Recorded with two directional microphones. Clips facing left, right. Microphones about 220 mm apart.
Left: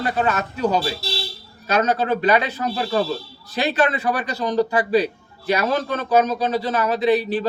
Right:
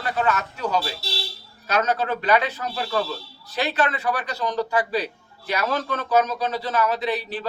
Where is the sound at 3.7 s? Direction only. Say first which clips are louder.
Left 4 dB; 15° left (ahead or behind).